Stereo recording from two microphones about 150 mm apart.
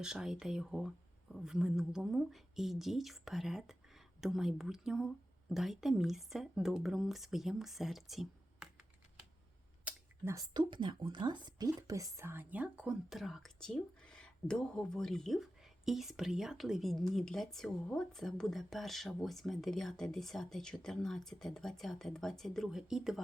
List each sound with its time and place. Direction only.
0.0 s speech: 5° right (ahead or behind)
9.8 s a sound: 20° right (ahead or behind)
10.5 s speech: 30° right (ahead or behind); by 23.2 s 5° right (ahead or behind)